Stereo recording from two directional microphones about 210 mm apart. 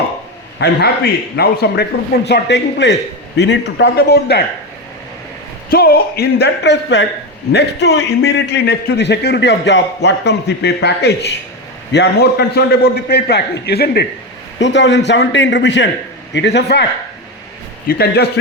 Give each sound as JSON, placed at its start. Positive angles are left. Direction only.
{"t": 0.6, "sound": "a man's voice", "side_deg": 50}
{"t": 5.7, "sound": "a man's voice", "side_deg": 50}
{"t": 17.8, "sound": "a man's voice", "side_deg": 50}